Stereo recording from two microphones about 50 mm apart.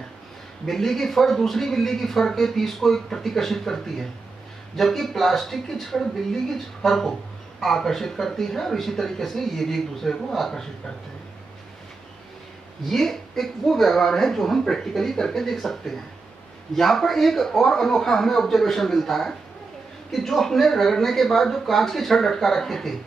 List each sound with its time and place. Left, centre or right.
0.7 s speech: centre
12.8 s speech: centre